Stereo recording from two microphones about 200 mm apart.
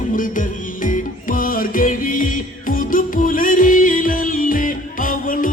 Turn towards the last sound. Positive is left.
turn(degrees=45)  # may be behind; listen again after turning